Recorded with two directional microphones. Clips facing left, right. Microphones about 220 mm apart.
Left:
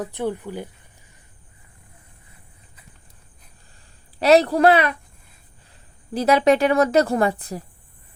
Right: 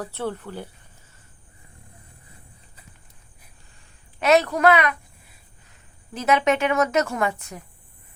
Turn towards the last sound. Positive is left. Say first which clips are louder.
# left 5 dB
turn(degrees=35)  # may be behind; listen again after turning